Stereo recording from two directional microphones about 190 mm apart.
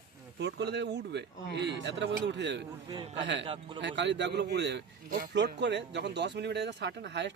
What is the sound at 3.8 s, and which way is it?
Speech, 70° right (ahead or behind).